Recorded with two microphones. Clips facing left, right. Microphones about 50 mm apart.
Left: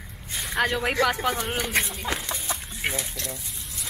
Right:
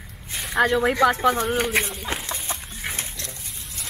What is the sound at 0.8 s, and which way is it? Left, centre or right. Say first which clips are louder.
Speech: right 3 dB; centre.